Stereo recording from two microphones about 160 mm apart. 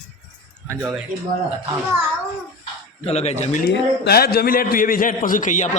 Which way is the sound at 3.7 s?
75° left (ahead or behind).